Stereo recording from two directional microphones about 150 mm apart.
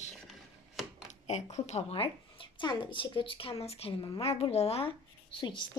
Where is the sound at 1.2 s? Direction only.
50° left (ahead or behind).